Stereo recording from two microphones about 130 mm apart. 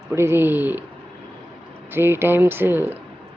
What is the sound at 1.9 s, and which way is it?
Speech, 15° right (ahead or behind).